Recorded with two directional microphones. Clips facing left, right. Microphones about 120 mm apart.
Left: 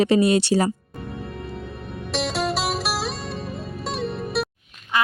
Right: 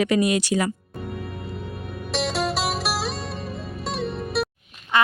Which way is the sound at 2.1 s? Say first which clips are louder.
Even; centre (ahead or behind).